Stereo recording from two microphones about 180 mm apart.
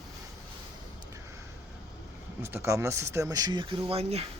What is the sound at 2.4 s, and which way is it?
Speech, 15° right (ahead or behind).